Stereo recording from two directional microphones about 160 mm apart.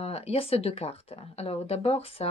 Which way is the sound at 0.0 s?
40° left (ahead or behind).